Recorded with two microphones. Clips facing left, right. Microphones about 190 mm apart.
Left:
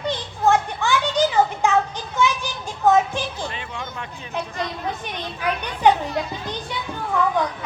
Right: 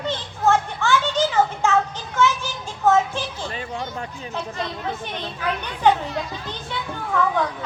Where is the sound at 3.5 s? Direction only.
40° right (ahead or behind).